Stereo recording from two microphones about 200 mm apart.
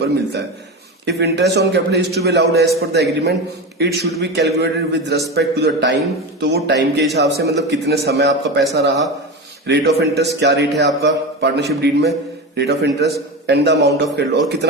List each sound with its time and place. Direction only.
1.0 s a man's voice: 55° right (ahead or behind)